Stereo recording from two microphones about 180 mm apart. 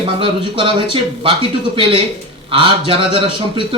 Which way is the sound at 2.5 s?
30° right (ahead or behind).